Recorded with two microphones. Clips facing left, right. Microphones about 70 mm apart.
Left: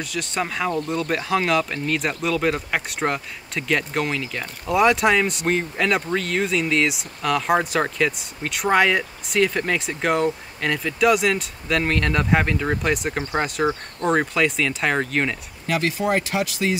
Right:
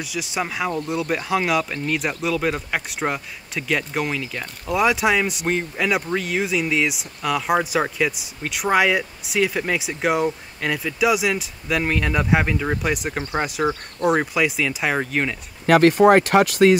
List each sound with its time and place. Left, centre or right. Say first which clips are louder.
0.0 s speech: even; centre
15.6 s speech: right 10 dB; right